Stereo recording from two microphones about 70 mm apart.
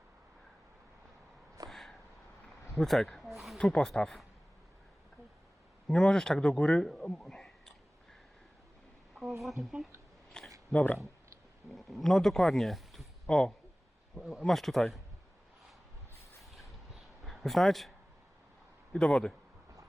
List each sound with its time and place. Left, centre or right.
1.7 s a sound: centre
2.7 s snake: centre
3.6 s speech: centre
5.9 s speech: centre
10.4 s a sound: centre
10.7 s speech: centre
11.7 s speech: centre
16.4 s a sound: centre
18.9 s speech: centre